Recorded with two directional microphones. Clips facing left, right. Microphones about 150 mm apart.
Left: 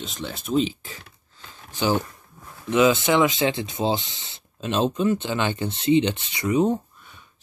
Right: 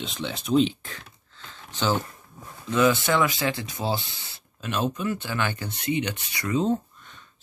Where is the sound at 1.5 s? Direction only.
10° left (ahead or behind).